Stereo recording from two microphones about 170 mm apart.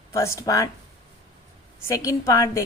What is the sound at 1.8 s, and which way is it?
Speech, 15° left (ahead or behind).